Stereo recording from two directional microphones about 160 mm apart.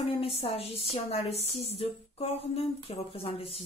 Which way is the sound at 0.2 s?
35° left (ahead or behind).